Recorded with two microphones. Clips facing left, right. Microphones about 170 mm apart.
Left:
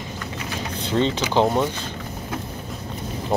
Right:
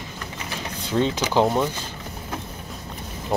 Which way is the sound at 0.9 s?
10° right (ahead or behind).